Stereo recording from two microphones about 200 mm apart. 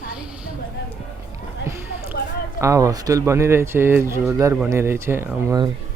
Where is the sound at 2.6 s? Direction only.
15° right (ahead or behind).